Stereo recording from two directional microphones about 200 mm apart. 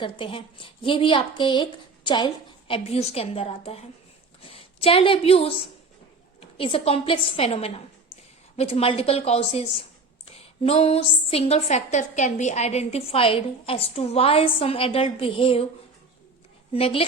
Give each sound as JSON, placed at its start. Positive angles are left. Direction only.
{"t": 0.0, "sound": "a woman's voice", "side_deg": 25}
{"t": 6.6, "sound": "a woman's voice", "side_deg": 25}
{"t": 16.7, "sound": "a woman's voice", "side_deg": 30}